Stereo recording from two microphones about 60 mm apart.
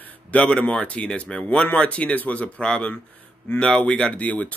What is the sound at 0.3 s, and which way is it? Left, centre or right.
Speech, centre.